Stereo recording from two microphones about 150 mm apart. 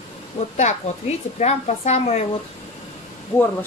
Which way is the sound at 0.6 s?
50° left (ahead or behind).